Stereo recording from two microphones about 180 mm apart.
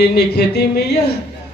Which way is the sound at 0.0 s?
65° left (ahead or behind).